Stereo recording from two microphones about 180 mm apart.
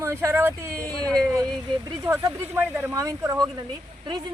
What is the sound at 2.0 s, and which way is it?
Speech, 15° right (ahead or behind).